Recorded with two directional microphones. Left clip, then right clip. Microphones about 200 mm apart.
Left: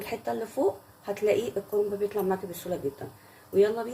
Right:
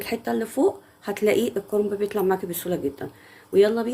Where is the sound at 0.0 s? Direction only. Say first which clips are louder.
Right 5 dB; 50° right (ahead or behind).